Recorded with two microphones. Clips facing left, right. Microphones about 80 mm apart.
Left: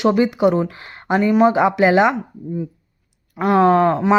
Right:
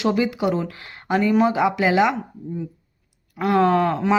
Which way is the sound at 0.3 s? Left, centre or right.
Left.